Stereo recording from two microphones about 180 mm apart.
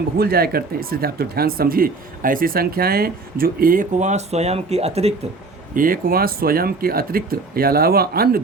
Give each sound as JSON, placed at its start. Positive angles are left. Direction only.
{"t": 0.2, "sound": "speech", "side_deg": -55}
{"t": 5.7, "sound": "speech", "side_deg": -50}